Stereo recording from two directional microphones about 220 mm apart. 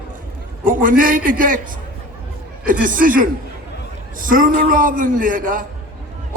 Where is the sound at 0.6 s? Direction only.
40° right (ahead or behind).